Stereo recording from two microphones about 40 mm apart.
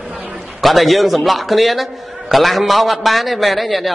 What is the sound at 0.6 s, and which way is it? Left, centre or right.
A man's voice, centre.